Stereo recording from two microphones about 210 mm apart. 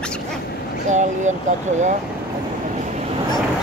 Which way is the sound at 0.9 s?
35° right (ahead or behind).